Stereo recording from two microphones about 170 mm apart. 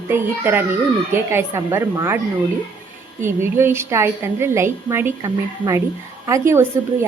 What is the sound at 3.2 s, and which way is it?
A woman's voice, 15° right (ahead or behind).